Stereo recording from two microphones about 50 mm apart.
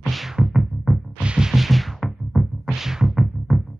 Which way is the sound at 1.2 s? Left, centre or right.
Right.